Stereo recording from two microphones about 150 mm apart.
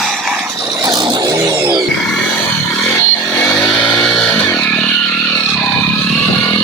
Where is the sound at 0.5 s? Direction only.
25° right (ahead or behind).